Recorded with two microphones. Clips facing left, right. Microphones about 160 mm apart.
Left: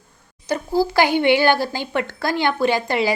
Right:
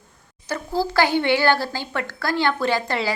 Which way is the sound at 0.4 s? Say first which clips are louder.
Left 4 dB; 15° left (ahead or behind).